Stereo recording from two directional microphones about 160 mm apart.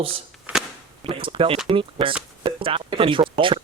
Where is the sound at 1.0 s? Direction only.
30° right (ahead or behind).